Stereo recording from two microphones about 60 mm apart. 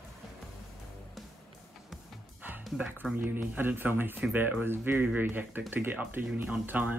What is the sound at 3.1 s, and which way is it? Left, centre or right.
Speech, right.